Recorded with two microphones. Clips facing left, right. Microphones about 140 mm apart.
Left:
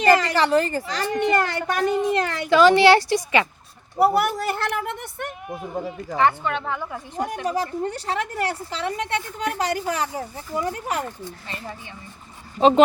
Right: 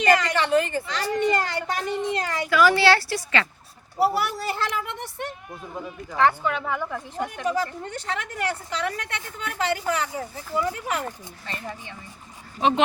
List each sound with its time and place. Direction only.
0.0 s a woman's voice: 35° left (ahead or behind)
1.2 s speech: 55° left (ahead or behind)
2.5 s speech: 25° left (ahead or behind)
3.9 s a sound: 50° left (ahead or behind)
6.4 s a woman's voice: 5° right (ahead or behind)
7.2 s speech: 35° left (ahead or behind)
12.5 s speech: 35° left (ahead or behind)